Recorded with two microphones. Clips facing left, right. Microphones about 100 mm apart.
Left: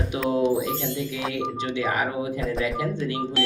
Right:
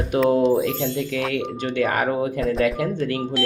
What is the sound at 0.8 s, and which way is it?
Speech, 60° right (ahead or behind).